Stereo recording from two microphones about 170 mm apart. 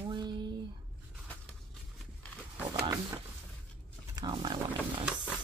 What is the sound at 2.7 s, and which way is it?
Speech, 25° right (ahead or behind).